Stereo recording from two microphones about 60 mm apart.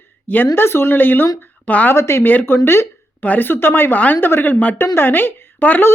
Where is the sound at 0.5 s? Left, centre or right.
Left.